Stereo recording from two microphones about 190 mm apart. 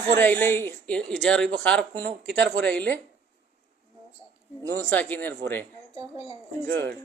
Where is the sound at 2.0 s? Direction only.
65° right (ahead or behind).